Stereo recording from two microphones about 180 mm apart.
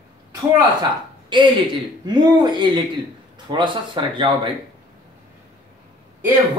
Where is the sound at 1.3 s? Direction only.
25° right (ahead or behind).